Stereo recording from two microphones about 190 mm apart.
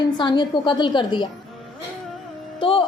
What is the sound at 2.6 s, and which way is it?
Speech, 25° left (ahead or behind).